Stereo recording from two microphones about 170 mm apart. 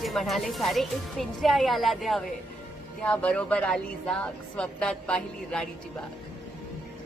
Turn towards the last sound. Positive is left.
turn(degrees=5)  # may be behind; listen again after turning